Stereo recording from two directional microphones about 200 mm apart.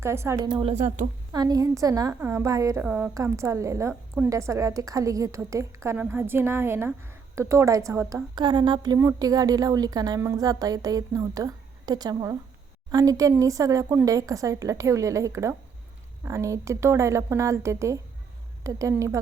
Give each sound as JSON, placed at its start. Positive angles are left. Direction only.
{"t": 0.0, "sound": "a woman's voice", "side_deg": -15}
{"t": 1.3, "sound": "a woman's voice", "side_deg": -20}